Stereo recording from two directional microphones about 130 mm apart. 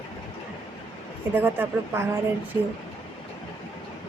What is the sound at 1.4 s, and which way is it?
Speech, 15° right (ahead or behind).